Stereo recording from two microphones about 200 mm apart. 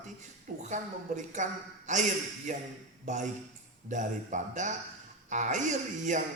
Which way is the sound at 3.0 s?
40° right (ahead or behind).